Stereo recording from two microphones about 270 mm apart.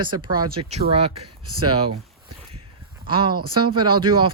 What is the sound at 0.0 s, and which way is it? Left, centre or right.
Speech, centre.